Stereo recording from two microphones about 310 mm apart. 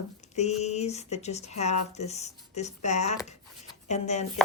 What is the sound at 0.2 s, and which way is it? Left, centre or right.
Speech, left.